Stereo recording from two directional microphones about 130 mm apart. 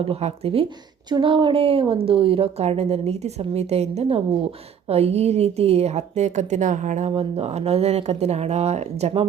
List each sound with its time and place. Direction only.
0.0 s a woman's voice: 55° right (ahead or behind); by 7.1 s 70° right (ahead or behind)
7.1 s a woman's voice: 50° right (ahead or behind)